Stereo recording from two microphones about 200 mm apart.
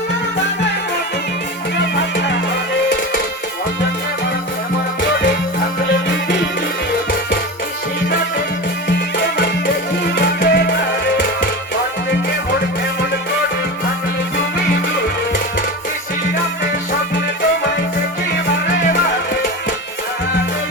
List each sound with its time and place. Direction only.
1.8 s music: 60° left (ahead or behind)
8.9 s music: 55° left (ahead or behind)